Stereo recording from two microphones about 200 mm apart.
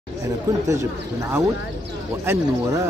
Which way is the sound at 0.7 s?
15° right (ahead or behind).